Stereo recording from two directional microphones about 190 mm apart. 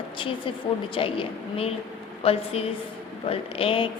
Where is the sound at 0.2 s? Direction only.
25° left (ahead or behind).